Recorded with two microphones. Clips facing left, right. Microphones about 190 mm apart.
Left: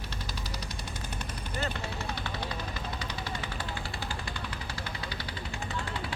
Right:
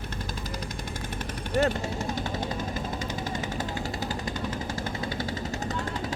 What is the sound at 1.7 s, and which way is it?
Music, 45° right (ahead or behind).